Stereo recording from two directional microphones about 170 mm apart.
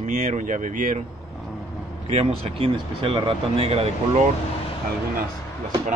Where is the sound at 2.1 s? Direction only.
35° right (ahead or behind).